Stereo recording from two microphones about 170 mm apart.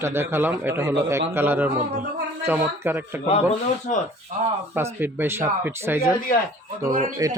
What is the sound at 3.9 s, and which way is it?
Speech, 50° left (ahead or behind).